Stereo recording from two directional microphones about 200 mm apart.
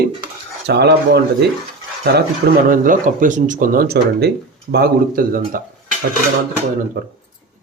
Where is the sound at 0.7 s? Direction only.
55° right (ahead or behind).